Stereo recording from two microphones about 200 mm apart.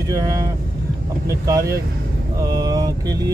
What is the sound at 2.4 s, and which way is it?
Mantra, 20° right (ahead or behind).